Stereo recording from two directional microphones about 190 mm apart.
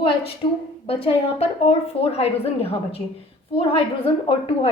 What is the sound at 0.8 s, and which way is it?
A woman's voice, 30° left (ahead or behind).